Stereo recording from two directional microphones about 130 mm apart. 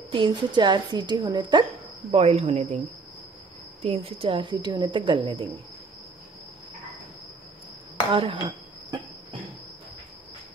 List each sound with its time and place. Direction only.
0.1 s a woman's voice: 40° right (ahead or behind)
2.0 s speech: 55° right (ahead or behind)
3.8 s a woman's voice: 50° right (ahead or behind)
8.1 s a woman's voice: 40° right (ahead or behind)